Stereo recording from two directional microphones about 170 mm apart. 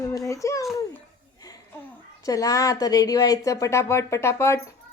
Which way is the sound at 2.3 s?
20° left (ahead or behind).